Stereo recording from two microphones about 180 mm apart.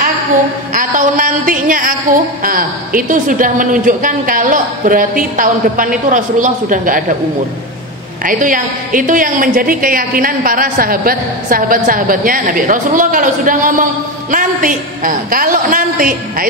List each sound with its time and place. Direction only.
0.7 s a woman's voice: 50° right (ahead or behind)
8.2 s a woman's voice: 50° right (ahead or behind)